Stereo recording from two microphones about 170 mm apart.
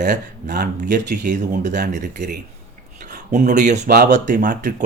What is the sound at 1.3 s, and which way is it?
Speech, 45° right (ahead or behind).